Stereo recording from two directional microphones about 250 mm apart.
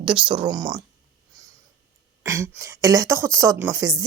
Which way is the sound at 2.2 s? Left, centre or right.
Centre.